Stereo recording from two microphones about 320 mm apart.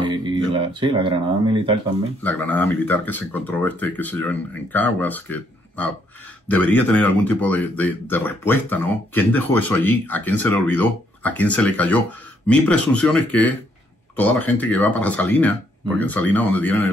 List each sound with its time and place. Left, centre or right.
0.0 s a sound: centre
0.5 s speech: centre
2.2 s speech: centre